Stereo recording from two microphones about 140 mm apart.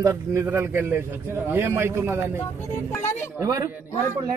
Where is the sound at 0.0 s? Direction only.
20° right (ahead or behind).